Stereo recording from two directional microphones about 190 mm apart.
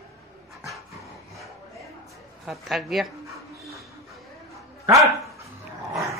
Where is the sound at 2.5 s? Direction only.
Centre (ahead or behind).